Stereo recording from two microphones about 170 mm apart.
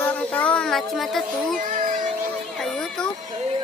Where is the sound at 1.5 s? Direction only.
55° right (ahead or behind).